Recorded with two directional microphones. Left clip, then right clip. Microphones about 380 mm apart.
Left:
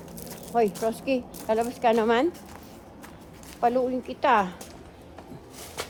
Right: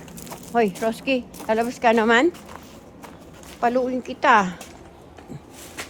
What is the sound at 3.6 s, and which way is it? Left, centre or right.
Speech, right.